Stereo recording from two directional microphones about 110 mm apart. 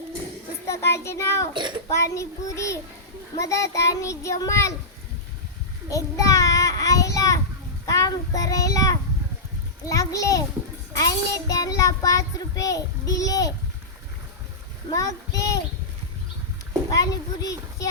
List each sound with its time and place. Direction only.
0.7 s a child's voice: 25° left (ahead or behind)
1.5 s a child's voice: 45° right (ahead or behind)
1.9 s a child's voice: 25° left (ahead or behind)
5.9 s child singing: 30° left (ahead or behind)
7.9 s a child's voice: 30° left (ahead or behind)
9.9 s child singing: 30° left (ahead or behind)
14.9 s a child's voice: 30° left (ahead or behind)
16.9 s a child's voice: 35° left (ahead or behind)